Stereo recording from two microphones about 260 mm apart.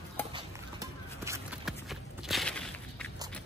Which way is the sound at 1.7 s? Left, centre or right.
Centre.